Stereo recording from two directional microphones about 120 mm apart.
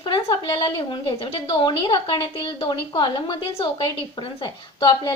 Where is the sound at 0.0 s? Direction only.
45° left (ahead or behind).